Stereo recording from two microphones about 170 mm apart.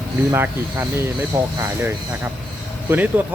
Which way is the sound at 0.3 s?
15° right (ahead or behind).